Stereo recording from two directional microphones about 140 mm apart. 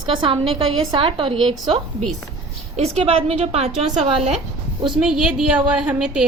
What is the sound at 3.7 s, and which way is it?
Speech, 5° right (ahead or behind).